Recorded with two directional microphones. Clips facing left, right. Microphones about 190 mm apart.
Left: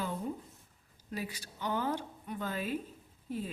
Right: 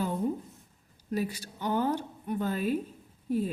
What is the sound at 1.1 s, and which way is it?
Speech, 45° right (ahead or behind).